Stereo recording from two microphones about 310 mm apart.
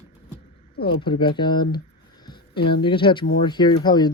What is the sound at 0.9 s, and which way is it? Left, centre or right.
Speech, centre.